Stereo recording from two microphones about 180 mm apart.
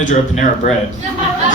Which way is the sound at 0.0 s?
45° left (ahead or behind).